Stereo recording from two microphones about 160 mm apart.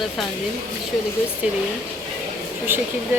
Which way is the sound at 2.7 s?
15° right (ahead or behind).